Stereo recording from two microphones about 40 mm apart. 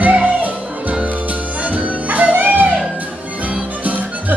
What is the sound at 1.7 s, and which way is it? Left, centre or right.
Music, right.